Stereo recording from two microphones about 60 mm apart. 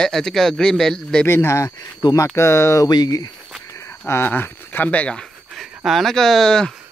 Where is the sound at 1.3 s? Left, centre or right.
Left.